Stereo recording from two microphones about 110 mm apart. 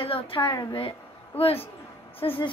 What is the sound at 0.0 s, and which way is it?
Speech, 55° left (ahead or behind).